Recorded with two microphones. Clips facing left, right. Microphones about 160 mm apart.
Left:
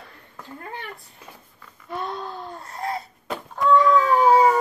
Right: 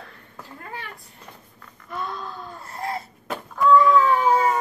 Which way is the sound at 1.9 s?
30° left (ahead or behind).